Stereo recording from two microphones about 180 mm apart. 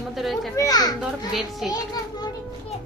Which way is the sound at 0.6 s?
20° left (ahead or behind).